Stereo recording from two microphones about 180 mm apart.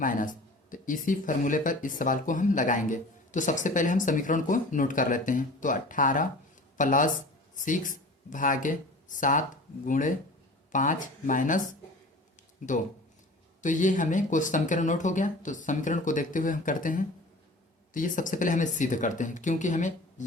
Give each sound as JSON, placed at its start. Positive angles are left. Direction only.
{"t": 0.0, "sound": "speech", "side_deg": 50}
{"t": 12.6, "sound": "speech", "side_deg": 45}